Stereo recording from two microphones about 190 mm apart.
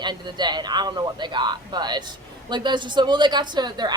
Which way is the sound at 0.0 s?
20° right (ahead or behind).